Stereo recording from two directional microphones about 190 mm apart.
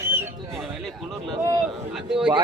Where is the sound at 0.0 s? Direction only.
15° right (ahead or behind).